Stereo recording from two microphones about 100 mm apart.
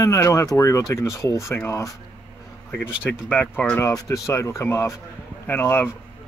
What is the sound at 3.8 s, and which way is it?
Speech, 30° left (ahead or behind).